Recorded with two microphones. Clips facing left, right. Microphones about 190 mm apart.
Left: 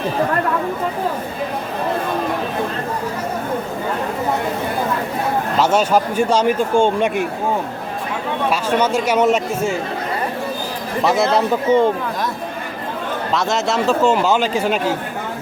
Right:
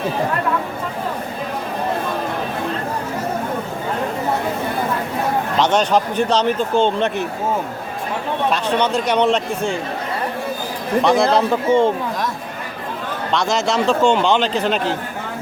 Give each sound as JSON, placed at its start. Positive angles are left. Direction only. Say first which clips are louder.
{"t": 5.5, "sound": "speech", "louder": "left 1 dB", "side_deg": 5}
{"t": 8.4, "sound": "speech", "louder": "left 1 dB", "side_deg": 5}
{"t": 11.0, "sound": "a man's voice", "louder": "even", "side_deg": 0}
{"t": 11.7, "sound": "speech", "louder": "left 1 dB", "side_deg": -30}
{"t": 13.3, "sound": "a man's voice", "louder": "right 1 dB", "side_deg": 0}